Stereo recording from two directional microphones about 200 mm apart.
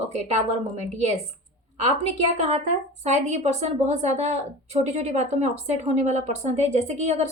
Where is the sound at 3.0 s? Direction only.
35° right (ahead or behind).